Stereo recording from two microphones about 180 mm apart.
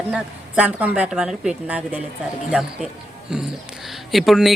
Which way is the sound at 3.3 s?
5° right (ahead or behind).